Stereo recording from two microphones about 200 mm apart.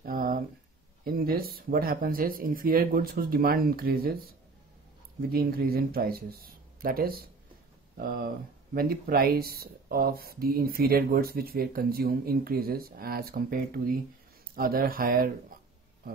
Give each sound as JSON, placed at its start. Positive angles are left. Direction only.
{"t": 0.0, "sound": "a sound", "side_deg": -45}
{"t": 1.0, "sound": "speech", "side_deg": -50}
{"t": 8.7, "sound": "speech", "side_deg": -50}